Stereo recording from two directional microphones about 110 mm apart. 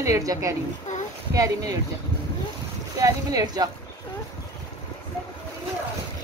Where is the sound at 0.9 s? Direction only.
90° left.